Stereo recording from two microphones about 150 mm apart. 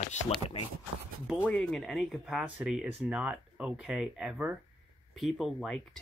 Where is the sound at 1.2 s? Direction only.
5° right (ahead or behind).